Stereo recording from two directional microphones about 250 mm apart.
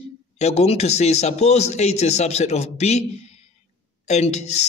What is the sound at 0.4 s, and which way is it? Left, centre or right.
A man's voice, left.